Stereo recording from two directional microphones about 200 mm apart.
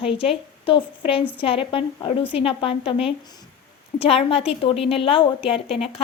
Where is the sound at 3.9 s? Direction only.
30° left (ahead or behind).